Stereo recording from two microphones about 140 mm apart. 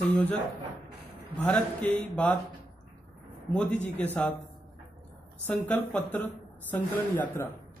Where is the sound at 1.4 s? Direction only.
10° left (ahead or behind).